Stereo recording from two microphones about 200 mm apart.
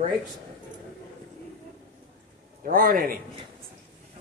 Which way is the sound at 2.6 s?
45° right (ahead or behind).